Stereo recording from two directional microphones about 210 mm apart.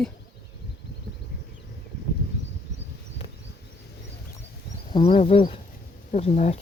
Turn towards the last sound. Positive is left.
turn(degrees=30)  # may be behind; listen again after turning